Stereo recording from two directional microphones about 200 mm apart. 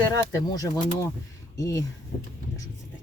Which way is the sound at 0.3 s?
15° left (ahead or behind).